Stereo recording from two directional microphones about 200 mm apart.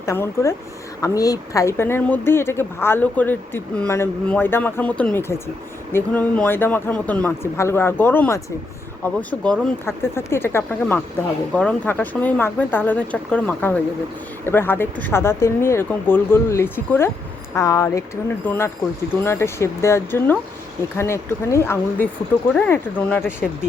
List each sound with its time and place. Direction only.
0.0 s speech: 15° left (ahead or behind)